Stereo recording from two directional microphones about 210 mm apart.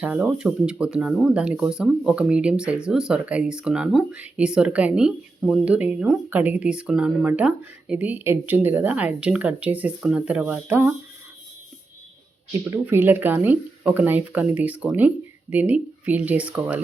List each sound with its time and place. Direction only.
0.0 s speech: 5° right (ahead or behind)
12.7 s speech: 10° right (ahead or behind)